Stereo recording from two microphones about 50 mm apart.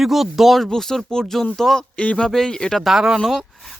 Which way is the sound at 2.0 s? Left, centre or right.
Left.